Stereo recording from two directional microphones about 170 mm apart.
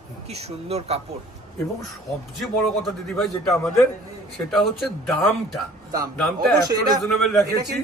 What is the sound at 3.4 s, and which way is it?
Speech, 5° left (ahead or behind).